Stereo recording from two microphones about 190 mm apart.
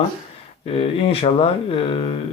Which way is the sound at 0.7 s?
30° left (ahead or behind).